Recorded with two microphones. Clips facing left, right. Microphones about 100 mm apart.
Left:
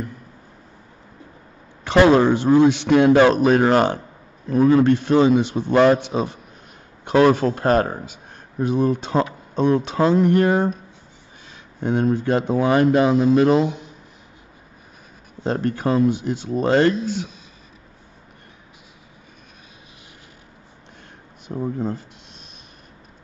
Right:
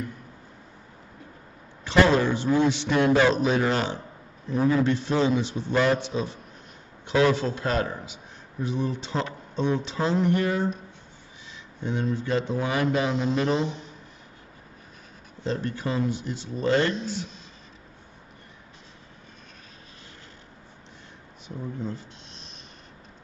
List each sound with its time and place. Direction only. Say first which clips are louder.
1.9 s a man's voice: left 6 dB; 60° left (ahead or behind)
13.7 s a sound: left 6 dB; 15° left (ahead or behind)
15.4 s a man's voice: left 7 dB; 55° left (ahead or behind)
21.5 s a man's voice: left 8 dB; 45° left (ahead or behind)